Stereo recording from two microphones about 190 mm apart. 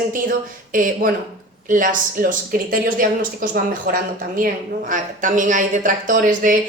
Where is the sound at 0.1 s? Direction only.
45° right (ahead or behind).